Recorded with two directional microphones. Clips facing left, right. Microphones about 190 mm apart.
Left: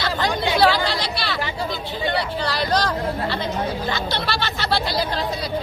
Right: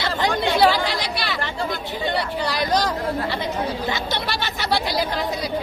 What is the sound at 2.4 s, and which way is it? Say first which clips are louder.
Vehicle: right 1 dB; 15° right (ahead or behind).